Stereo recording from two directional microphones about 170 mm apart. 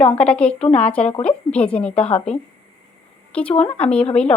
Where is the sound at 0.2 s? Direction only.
5° left (ahead or behind).